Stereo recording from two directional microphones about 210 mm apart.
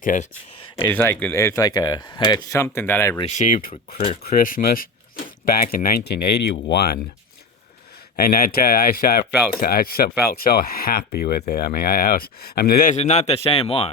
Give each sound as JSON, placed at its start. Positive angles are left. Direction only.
{"t": 0.0, "sound": "speech", "side_deg": 40}
{"t": 0.9, "sound": "speech", "side_deg": 10}
{"t": 3.2, "sound": "speech", "side_deg": 35}
{"t": 3.9, "sound": "speech", "side_deg": 30}
{"t": 4.2, "sound": "speech", "side_deg": 45}
{"t": 8.1, "sound": "speech", "side_deg": 45}